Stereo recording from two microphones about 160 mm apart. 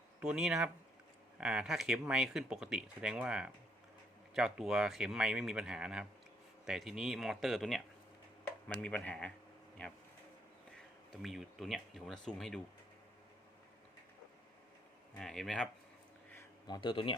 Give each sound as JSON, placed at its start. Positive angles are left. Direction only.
{"t": 0.2, "sound": "speech", "side_deg": -5}
{"t": 8.8, "sound": "speech", "side_deg": 5}
{"t": 11.1, "sound": "speech", "side_deg": 0}
{"t": 15.2, "sound": "speech", "side_deg": 5}
{"t": 16.6, "sound": "speech", "side_deg": 30}